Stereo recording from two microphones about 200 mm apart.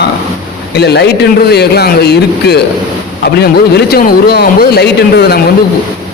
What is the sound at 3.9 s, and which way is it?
A man's voice, 50° left (ahead or behind).